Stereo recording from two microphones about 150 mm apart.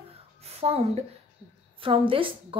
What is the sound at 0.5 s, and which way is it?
A woman's voice, 45° right (ahead or behind).